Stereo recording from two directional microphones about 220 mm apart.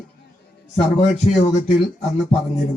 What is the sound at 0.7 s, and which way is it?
Speech, 30° left (ahead or behind).